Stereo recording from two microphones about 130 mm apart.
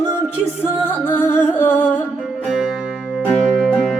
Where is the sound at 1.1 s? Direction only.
15° left (ahead or behind).